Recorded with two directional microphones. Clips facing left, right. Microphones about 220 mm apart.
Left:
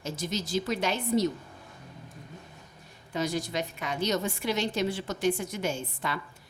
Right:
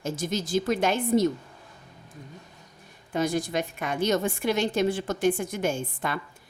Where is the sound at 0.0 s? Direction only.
50° right (ahead or behind).